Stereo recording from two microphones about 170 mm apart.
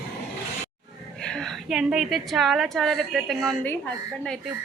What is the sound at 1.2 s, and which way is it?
A woman's voice, 5° left (ahead or behind).